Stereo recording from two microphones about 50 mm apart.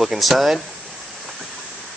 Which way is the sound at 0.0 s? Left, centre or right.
Centre.